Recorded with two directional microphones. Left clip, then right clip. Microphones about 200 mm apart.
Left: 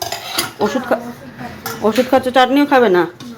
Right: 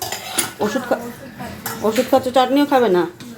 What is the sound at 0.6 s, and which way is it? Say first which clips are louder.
Speech: left 3 dB; 5° left (ahead or behind).